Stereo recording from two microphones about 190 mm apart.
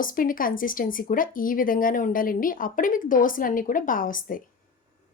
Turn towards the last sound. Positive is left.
turn(degrees=45)  # may be behind; listen again after turning